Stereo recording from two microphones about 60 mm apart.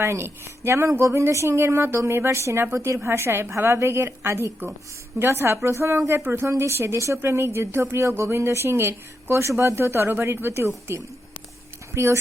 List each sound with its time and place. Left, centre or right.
0.0 s a woman's voice: right
6.1 s a woman's voice: right
11.9 s a woman's voice: right